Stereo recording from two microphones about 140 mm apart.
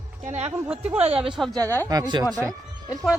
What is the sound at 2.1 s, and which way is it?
Speech, 30° right (ahead or behind).